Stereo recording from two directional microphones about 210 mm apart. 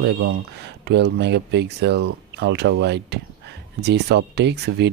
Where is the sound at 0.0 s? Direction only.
50° right (ahead or behind).